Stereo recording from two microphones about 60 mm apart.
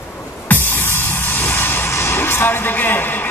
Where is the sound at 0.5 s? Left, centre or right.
Left.